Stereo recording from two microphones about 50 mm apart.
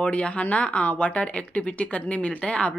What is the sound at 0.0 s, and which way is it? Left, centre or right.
Speech, left.